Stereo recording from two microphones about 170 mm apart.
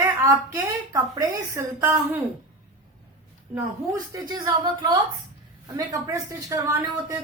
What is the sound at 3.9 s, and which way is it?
Speech, 20° right (ahead or behind).